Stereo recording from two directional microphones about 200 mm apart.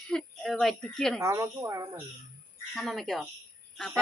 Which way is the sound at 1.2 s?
15° right (ahead or behind).